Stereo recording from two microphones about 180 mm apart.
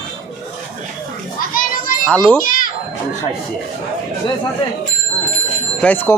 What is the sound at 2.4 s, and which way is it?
Children playing, 50° left (ahead or behind).